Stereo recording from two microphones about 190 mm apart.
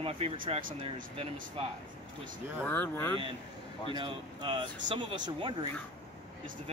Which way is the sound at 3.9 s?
25° right (ahead or behind).